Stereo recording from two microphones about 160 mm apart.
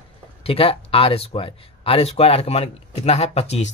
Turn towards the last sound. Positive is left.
turn(degrees=45)  # may be behind; listen again after turning